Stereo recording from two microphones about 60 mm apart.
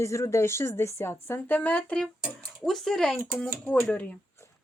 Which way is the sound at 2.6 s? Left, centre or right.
Centre.